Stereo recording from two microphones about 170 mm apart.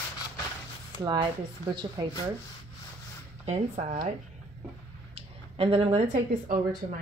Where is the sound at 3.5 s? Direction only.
35° right (ahead or behind).